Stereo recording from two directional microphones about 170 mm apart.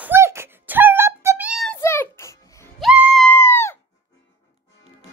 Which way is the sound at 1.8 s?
15° left (ahead or behind).